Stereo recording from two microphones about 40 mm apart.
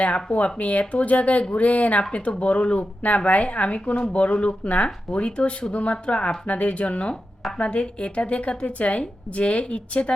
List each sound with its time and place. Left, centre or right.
0.3 s a woman's voice: left